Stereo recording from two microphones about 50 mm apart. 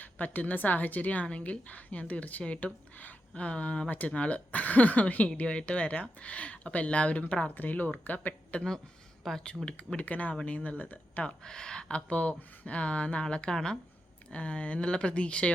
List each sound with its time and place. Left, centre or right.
0.0 s a woman's voice: left
9.2 s speech: centre
9.6 s speech: centre
10.0 s a woman's voice: left
11.4 s speech: centre